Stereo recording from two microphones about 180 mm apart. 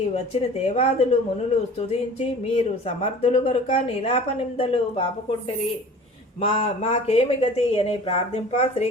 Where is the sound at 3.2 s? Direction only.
40° left (ahead or behind).